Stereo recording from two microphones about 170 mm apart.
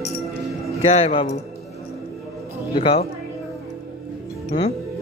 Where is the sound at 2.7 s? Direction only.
30° left (ahead or behind).